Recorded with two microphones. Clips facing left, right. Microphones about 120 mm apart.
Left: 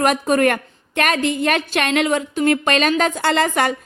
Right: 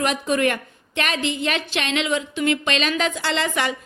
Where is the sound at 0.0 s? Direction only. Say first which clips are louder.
Left 5 dB; 50° left (ahead or behind).